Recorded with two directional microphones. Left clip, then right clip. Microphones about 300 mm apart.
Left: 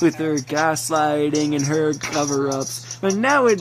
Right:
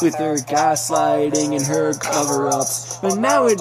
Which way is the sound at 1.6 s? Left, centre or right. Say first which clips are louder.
Right 1 dB; right.